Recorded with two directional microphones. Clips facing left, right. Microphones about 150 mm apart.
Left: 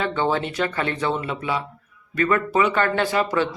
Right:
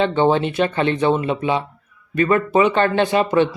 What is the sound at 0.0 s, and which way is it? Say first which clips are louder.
Speech: right 6 dB; 20° right (ahead or behind).